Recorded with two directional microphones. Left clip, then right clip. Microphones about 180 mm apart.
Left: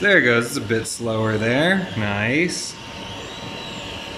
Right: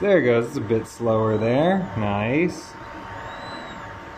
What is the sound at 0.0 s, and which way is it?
Speech, 5° right (ahead or behind).